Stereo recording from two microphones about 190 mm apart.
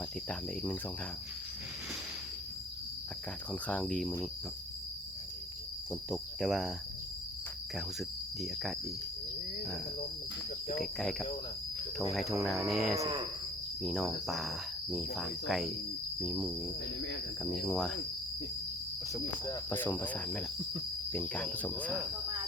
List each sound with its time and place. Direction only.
0.3 s cricket: 5° left (ahead or behind)
3.5 s cricket: 5° left (ahead or behind)
5.9 s cricket: centre (ahead or behind)
10.8 s cricket: centre (ahead or behind)
13.0 s speech: 25° right (ahead or behind)
13.8 s cricket: centre (ahead or behind)
19.5 s cricket: 10° left (ahead or behind)